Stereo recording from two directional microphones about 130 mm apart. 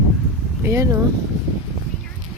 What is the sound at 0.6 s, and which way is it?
Speech, 20° right (ahead or behind).